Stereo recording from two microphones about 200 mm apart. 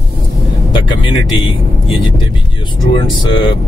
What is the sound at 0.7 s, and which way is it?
Speech, 25° left (ahead or behind).